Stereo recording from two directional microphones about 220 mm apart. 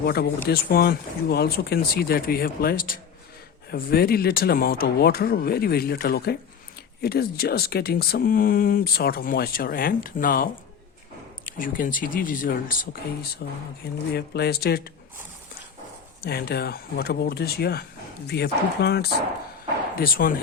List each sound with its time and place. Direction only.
0.0 s speech: 45° left (ahead or behind)
16.2 s speech: 45° left (ahead or behind)